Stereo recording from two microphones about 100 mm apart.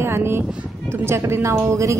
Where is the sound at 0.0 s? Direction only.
25° right (ahead or behind).